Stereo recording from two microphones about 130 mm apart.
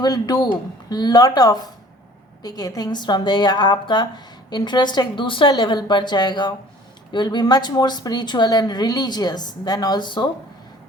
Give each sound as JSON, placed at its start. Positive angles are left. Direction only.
{"t": 0.0, "sound": "a woman's voice", "side_deg": 30}